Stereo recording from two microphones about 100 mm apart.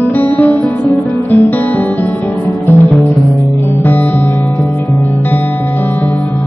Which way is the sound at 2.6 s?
25° left (ahead or behind).